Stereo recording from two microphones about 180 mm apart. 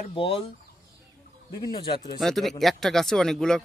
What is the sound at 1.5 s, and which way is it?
Speech, 25° left (ahead or behind).